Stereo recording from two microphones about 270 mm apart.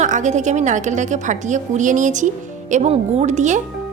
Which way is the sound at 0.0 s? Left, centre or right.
Right.